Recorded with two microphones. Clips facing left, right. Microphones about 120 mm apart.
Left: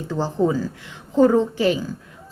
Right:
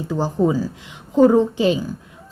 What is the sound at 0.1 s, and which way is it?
A woman's voice, 15° right (ahead or behind).